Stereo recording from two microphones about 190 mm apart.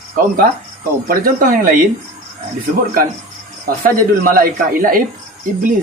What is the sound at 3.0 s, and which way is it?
Speech, 50° right (ahead or behind).